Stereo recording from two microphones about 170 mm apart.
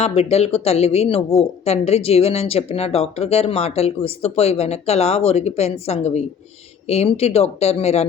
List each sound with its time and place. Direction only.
0.0 s speech: 35° left (ahead or behind)